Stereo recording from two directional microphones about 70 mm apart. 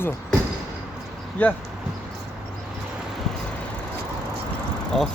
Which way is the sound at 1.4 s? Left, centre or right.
Left.